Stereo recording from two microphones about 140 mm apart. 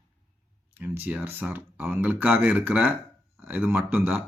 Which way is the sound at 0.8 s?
15° right (ahead or behind).